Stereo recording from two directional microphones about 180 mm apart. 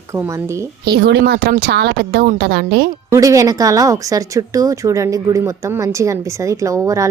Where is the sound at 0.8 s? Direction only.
60° right (ahead or behind).